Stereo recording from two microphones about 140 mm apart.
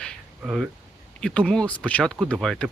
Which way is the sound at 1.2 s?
5° left (ahead or behind).